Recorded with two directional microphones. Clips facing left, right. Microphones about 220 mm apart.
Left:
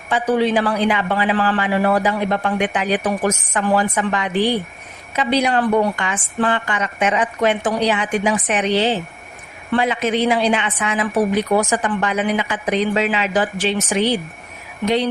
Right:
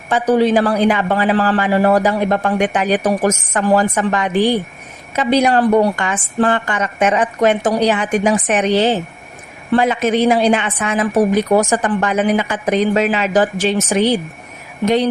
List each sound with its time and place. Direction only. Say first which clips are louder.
0.1 s a man's voice: right 4 dB; 40° right (ahead or behind)